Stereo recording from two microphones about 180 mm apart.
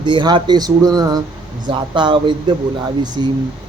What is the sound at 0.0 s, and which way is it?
Speech, 25° right (ahead or behind).